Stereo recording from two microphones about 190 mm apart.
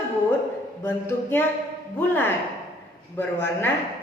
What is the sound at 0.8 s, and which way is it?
A woman's voice, 10° left (ahead or behind).